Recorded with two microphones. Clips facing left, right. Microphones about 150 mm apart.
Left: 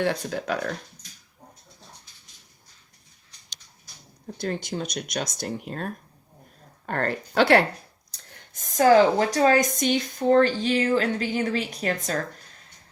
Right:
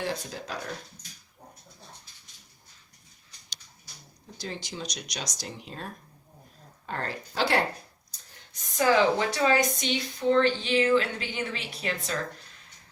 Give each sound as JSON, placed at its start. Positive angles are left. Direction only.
{"t": 0.0, "sound": "speech", "side_deg": 65}
{"t": 4.4, "sound": "speech", "side_deg": 55}
{"t": 8.5, "sound": "speech", "side_deg": 45}